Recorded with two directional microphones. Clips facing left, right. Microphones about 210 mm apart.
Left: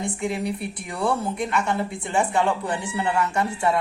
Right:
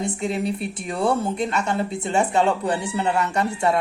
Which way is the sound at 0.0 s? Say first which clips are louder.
Right 2 dB; 25° right (ahead or behind).